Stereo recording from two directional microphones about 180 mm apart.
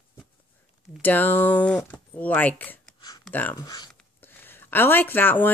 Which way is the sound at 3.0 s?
20° left (ahead or behind).